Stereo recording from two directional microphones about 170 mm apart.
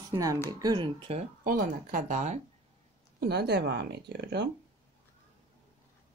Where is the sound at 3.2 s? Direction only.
70° right (ahead or behind).